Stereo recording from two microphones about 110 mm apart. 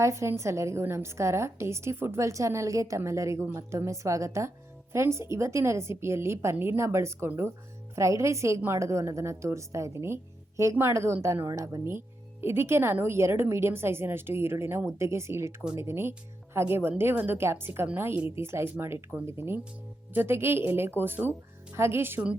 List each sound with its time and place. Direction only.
0.0 s a woman's voice: 25° right (ahead or behind)